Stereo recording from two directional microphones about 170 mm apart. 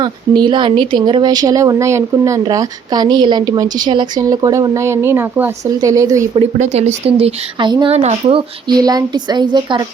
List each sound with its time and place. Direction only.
0.0 s speech: 25° right (ahead or behind)
6.3 s speech: 35° right (ahead or behind)